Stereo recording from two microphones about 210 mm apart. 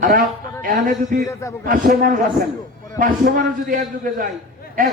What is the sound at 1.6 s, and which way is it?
A man's voice, 40° right (ahead or behind).